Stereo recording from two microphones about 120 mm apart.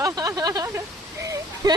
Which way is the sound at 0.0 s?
30° right (ahead or behind).